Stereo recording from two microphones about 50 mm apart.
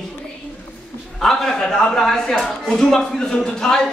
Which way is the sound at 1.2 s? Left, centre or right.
Centre.